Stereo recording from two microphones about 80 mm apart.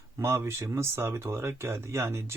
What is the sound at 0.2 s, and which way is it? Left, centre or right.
Speech, right.